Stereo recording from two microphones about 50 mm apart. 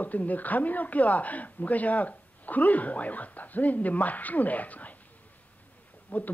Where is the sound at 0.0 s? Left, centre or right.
Left.